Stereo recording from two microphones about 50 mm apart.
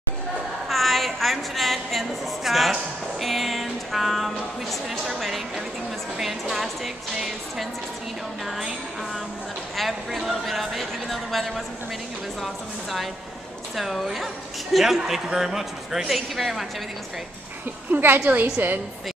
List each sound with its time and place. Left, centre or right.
0.7 s a woman's voice: centre
3.2 s a sound: centre
6.1 s a woman's voice: centre
9.8 s a woman's voice: centre
13.7 s a woman's voice: centre
18.0 s a woman's voice: right